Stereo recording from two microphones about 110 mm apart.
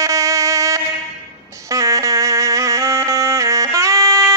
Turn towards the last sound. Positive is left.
turn(degrees=-30)  # may be behind; listen again after turning